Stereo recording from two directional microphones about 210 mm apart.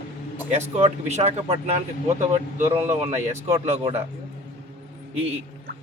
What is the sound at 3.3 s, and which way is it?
Speech, 30° right (ahead or behind).